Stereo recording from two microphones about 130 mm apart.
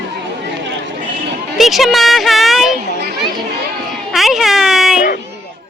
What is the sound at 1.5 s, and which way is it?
Speech, centre (ahead or behind).